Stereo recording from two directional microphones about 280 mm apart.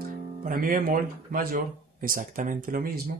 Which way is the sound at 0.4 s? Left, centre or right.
Right.